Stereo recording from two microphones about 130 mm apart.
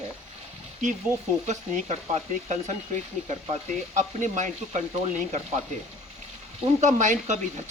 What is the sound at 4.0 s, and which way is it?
Speech, 70° right (ahead or behind).